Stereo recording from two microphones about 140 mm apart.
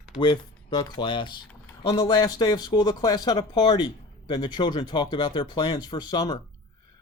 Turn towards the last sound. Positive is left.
turn(degrees=30)  # may be behind; listen again after turning